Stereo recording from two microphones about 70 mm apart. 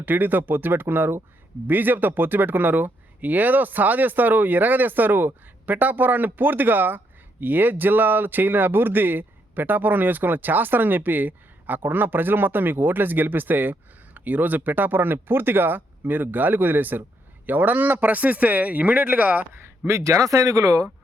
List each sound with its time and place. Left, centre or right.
0.0 s speech: right
19.9 s speech: right